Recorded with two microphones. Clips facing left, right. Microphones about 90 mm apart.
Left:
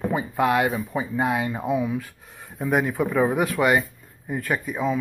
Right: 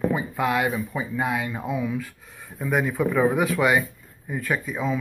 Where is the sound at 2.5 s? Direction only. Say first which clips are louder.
Left 1 dB; 15° left (ahead or behind).